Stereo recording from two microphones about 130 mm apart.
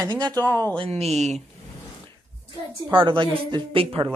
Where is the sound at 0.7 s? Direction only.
50° right (ahead or behind).